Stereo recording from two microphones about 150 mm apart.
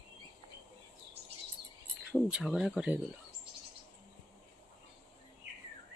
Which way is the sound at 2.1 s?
5° right (ahead or behind).